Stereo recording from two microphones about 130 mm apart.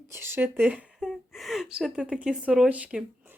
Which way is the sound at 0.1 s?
15° right (ahead or behind).